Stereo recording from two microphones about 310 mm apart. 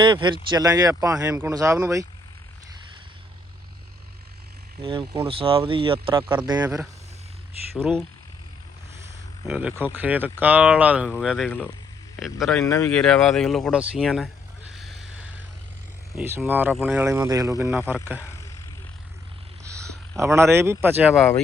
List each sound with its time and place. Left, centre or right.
0.0 s speech: centre
4.8 s speech: centre
7.8 s speech: centre
9.5 s speech: centre
16.1 s speech: centre
19.6 s speech: centre